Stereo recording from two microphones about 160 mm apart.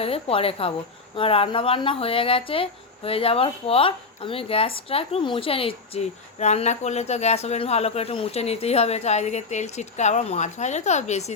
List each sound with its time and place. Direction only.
0.0 s speech: 35° left (ahead or behind)